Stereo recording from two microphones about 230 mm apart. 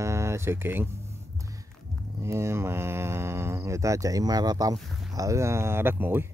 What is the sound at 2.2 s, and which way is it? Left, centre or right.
Speech, centre.